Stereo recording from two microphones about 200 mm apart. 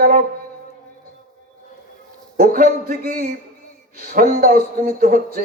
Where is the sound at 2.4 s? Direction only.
45° right (ahead or behind).